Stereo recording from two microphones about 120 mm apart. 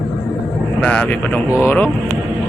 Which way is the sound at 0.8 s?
10° left (ahead or behind).